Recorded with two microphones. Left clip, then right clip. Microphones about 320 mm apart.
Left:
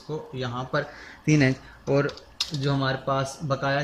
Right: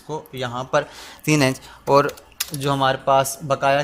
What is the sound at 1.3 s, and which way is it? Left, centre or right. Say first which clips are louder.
Speech: right 4 dB; right.